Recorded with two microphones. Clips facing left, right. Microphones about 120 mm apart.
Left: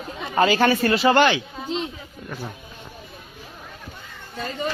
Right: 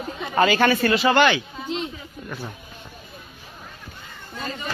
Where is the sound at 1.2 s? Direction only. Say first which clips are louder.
Even; 25° left (ahead or behind).